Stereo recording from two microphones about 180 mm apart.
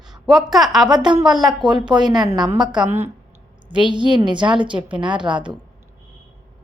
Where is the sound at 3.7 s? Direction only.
25° right (ahead or behind).